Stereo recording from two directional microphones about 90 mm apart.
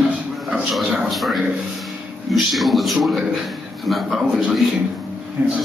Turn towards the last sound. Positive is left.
turn(degrees=-15)  # may be behind; listen again after turning